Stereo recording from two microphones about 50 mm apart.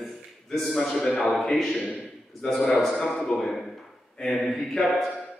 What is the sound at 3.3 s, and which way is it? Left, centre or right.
A man's voice, centre.